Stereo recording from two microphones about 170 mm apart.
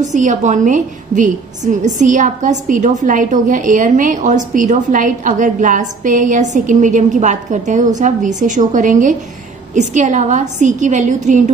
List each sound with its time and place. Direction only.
0.1 s a woman's voice: 45° right (ahead or behind)